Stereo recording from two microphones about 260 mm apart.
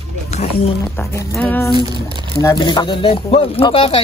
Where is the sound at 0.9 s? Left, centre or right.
Centre.